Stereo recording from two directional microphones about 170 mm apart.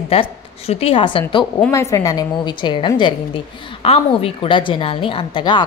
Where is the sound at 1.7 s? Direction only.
15° left (ahead or behind).